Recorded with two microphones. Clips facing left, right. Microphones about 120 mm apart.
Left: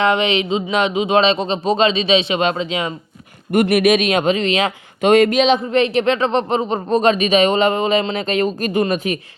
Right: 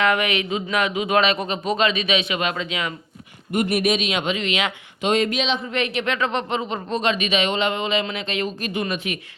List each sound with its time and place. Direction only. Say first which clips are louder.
0.0 s speech: left 4 dB; 25° left (ahead or behind)
3.5 s a man's voice: left 7 dB; 70° left (ahead or behind)
4.1 s speech: left 7 dB; 40° left (ahead or behind)
5.0 s speech: left 9 dB; 55° left (ahead or behind)
5.7 s speech: left 8 dB; 35° left (ahead or behind)